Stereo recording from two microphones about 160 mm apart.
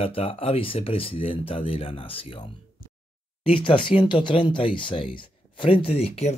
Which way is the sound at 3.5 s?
30° left (ahead or behind).